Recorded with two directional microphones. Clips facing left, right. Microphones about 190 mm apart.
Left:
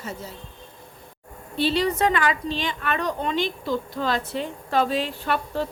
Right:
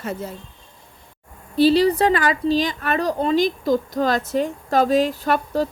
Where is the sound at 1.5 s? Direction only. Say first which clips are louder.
Right 7 dB; 35° right (ahead or behind).